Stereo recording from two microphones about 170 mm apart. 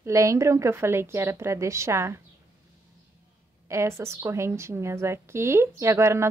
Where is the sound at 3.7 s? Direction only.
15° right (ahead or behind).